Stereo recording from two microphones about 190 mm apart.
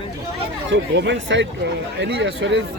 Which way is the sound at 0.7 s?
70° right (ahead or behind).